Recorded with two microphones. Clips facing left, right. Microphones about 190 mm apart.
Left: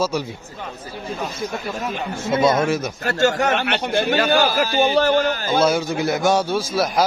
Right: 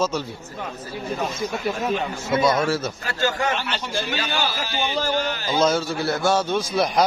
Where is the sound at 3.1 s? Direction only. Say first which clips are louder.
Left 6 dB; 70° left (ahead or behind); by 5.6 s 50° left (ahead or behind).